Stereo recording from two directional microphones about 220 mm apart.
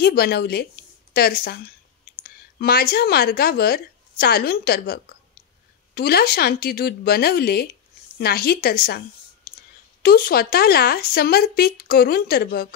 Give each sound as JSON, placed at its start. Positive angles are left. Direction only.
{"t": 0.0, "sound": "a woman's voice", "side_deg": 45}
{"t": 10.0, "sound": "speech", "side_deg": 40}